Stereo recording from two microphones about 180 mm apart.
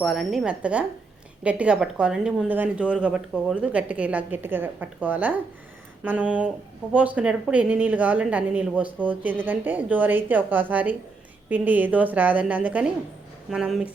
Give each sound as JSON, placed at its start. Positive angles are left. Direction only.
{"t": 0.0, "sound": "speech", "side_deg": 0}